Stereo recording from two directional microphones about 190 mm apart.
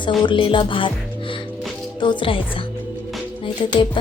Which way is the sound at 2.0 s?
25° left (ahead or behind).